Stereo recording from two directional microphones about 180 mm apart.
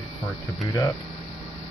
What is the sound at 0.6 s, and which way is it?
Speech, 20° left (ahead or behind).